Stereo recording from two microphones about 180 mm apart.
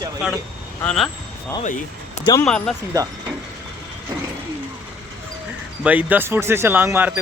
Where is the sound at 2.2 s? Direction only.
20° left (ahead or behind).